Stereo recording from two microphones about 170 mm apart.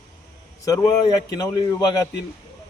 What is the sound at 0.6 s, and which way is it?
A man's voice, 20° left (ahead or behind).